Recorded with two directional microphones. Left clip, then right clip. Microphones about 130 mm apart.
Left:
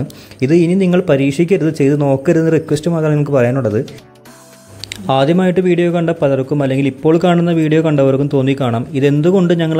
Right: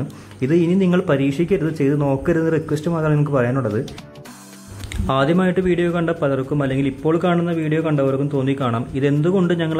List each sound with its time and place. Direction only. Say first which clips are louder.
0.4 s speech: left 5 dB; 35° left (ahead or behind)
5.0 s a man's voice: left 5 dB; 35° left (ahead or behind)